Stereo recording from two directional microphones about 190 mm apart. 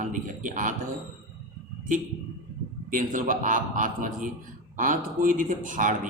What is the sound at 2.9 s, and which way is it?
A man's voice, 45° right (ahead or behind).